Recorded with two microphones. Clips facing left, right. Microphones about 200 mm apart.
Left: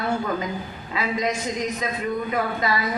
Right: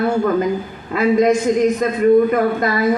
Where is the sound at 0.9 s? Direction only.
50° right (ahead or behind).